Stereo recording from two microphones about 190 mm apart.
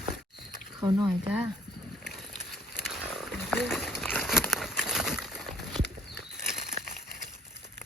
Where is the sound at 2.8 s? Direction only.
Centre (ahead or behind).